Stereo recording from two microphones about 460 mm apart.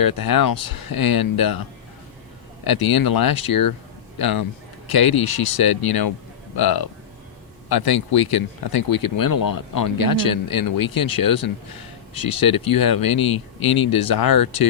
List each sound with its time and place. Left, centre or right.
0.0 s speech: left
2.6 s speech: left